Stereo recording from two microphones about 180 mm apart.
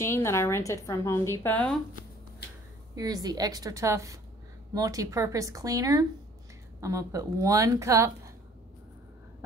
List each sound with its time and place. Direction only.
0.0 s a woman's voice: 15° left (ahead or behind)
3.0 s a woman's voice: 20° right (ahead or behind)